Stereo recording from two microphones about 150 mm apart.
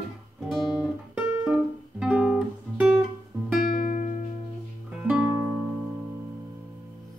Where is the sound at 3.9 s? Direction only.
55° left (ahead or behind).